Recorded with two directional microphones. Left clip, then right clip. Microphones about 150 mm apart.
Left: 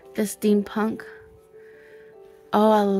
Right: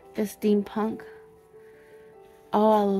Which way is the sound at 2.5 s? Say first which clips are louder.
Left 2 dB; 30° left (ahead or behind).